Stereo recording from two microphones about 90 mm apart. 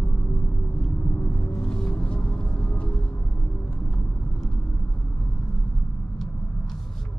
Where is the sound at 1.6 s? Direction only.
10° left (ahead or behind).